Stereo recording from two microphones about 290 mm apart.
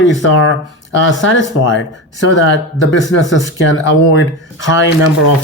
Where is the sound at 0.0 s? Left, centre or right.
Left.